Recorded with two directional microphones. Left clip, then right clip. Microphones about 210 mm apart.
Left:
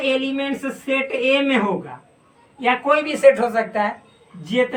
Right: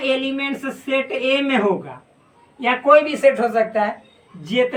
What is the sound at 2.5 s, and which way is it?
A woman's voice, 20° left (ahead or behind).